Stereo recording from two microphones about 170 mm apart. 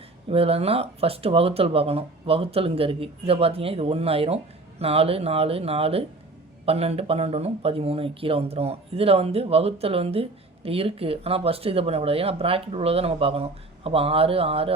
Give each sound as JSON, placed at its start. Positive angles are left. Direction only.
{"t": 0.3, "sound": "speech", "side_deg": -35}